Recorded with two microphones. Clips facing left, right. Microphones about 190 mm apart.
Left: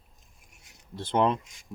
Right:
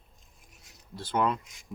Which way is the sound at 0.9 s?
25° left (ahead or behind).